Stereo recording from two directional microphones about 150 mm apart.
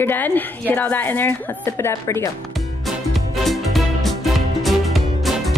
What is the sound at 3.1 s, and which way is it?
Music, centre (ahead or behind).